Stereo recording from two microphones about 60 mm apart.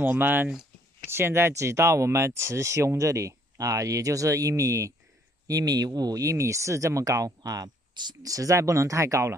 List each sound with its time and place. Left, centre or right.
0.0 s speech: right
1.1 s speech: right
1.5 s speech: right
5.5 s speech: right
8.2 s speech: right